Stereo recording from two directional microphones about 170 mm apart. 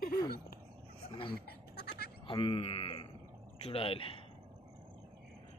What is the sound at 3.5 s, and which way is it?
Speech, 35° left (ahead or behind).